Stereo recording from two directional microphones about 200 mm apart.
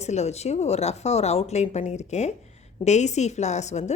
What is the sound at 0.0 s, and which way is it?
A woman's voice, 35° left (ahead or behind).